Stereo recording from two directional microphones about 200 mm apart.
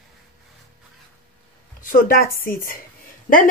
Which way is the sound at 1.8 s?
45° left (ahead or behind).